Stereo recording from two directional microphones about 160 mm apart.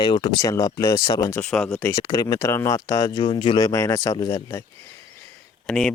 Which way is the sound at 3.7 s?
20° left (ahead or behind).